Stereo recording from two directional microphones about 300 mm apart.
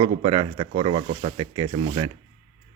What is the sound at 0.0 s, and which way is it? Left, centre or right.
Speech, centre.